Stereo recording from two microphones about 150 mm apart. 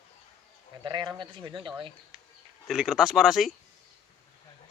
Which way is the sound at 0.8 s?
30° right (ahead or behind).